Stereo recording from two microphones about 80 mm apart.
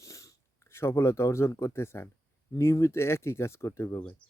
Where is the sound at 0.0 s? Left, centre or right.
Left.